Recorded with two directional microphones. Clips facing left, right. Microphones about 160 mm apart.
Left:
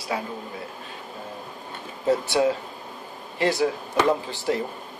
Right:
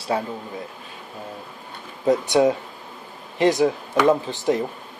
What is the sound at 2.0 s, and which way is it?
Speech, 20° right (ahead or behind).